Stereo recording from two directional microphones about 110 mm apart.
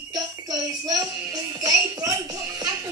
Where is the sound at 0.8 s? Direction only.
30° right (ahead or behind).